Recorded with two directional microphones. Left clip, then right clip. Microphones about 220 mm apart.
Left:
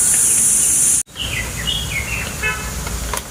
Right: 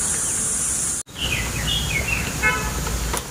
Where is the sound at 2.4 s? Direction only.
40° right (ahead or behind).